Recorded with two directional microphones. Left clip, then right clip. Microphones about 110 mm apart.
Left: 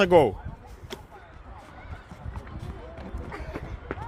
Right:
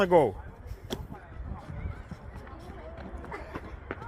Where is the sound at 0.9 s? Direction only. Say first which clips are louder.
Right 2 dB; 90° right.